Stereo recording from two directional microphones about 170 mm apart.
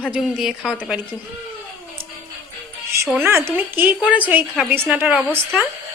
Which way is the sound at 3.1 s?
15° right (ahead or behind).